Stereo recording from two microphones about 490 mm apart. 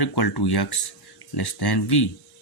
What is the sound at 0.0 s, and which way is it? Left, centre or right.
Speech, left.